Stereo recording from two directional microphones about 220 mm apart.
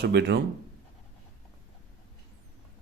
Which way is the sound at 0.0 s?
50° right (ahead or behind).